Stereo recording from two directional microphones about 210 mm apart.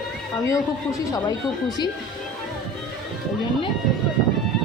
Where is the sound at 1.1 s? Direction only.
20° left (ahead or behind).